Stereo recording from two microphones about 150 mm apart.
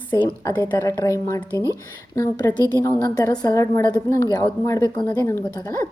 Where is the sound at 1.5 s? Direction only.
20° right (ahead or behind).